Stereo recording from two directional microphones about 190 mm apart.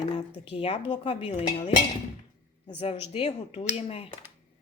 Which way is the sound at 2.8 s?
30° left (ahead or behind).